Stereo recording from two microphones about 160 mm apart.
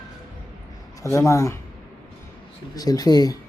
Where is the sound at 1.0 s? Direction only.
20° left (ahead or behind).